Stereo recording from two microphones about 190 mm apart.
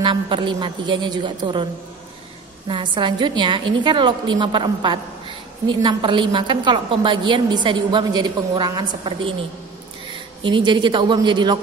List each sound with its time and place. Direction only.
0.0 s a woman's voice: 25° right (ahead or behind)
2.7 s a woman's voice: 25° right (ahead or behind)
10.4 s a woman's voice: 25° right (ahead or behind)